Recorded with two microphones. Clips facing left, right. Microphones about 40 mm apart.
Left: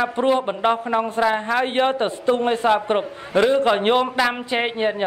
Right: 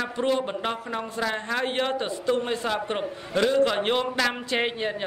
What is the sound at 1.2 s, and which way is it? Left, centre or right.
A man's voice, left.